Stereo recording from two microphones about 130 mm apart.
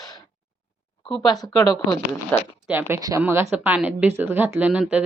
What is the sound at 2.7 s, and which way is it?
Speech, 15° right (ahead or behind).